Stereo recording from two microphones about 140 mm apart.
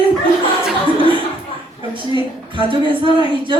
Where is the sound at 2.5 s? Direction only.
35° right (ahead or behind).